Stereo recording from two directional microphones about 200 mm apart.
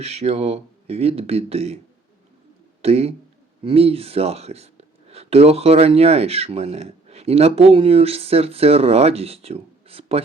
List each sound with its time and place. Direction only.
0.0 s speech: 30° right (ahead or behind)
2.8 s speech: 30° right (ahead or behind)